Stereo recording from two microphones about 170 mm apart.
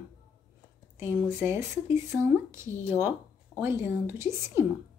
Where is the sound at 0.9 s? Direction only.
15° right (ahead or behind).